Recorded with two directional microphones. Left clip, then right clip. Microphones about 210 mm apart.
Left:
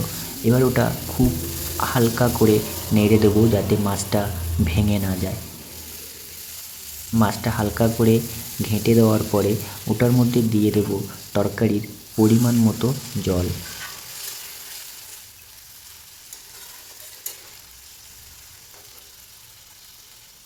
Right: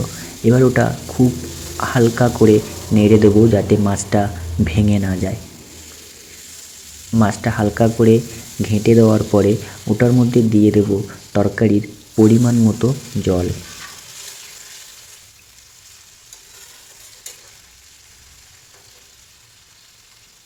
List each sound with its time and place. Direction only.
0.4 s speech: 5° right (ahead or behind)
7.1 s speech: 5° right (ahead or behind)